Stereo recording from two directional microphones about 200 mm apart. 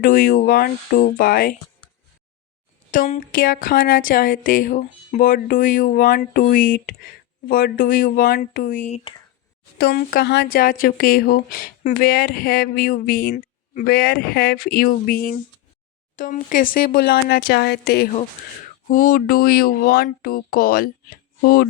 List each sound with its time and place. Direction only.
0.0 s speech: 45° left (ahead or behind)
2.9 s speech: 40° left (ahead or behind)